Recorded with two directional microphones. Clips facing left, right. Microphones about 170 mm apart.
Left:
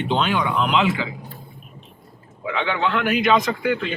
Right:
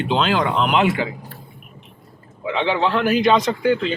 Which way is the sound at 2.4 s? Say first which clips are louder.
Right 3 dB; 25° right (ahead or behind).